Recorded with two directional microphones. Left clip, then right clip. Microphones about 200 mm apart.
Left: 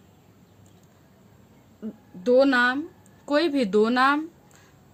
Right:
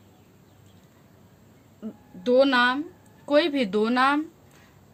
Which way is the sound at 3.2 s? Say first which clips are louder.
Right 1 dB; 35° left (ahead or behind).